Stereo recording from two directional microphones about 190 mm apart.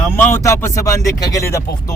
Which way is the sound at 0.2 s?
10° left (ahead or behind).